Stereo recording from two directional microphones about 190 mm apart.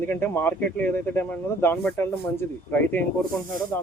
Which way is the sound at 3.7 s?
10° left (ahead or behind).